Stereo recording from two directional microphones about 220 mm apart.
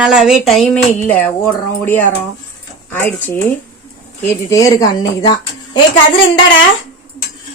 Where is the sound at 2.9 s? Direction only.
10° left (ahead or behind).